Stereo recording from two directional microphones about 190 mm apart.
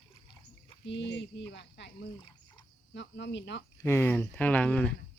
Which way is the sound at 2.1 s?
25° left (ahead or behind).